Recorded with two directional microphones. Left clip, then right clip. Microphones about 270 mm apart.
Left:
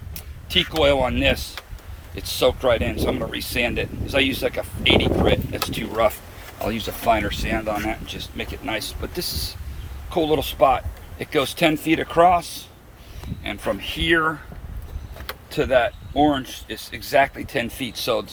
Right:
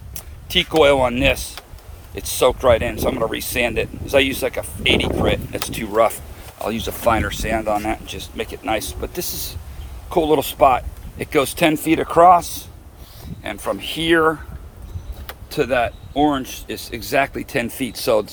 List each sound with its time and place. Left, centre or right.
0.1 s speech: centre
10.1 s speech: centre
15.4 s speech: centre